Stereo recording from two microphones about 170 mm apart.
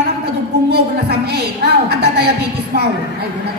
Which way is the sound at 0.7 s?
70° right (ahead or behind).